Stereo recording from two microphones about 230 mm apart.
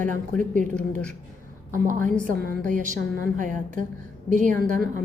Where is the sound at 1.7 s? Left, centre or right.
Right.